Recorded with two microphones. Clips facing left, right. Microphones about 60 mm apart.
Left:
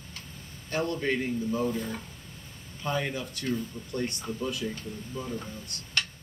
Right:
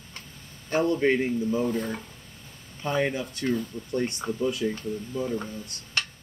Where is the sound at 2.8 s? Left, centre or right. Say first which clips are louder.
Right 4 dB; right.